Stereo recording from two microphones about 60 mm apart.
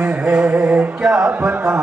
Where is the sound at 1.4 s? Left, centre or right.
Right.